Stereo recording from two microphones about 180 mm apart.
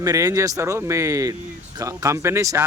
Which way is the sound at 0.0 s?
20° right (ahead or behind).